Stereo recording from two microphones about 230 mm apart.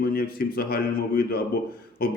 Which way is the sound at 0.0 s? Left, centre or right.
Left.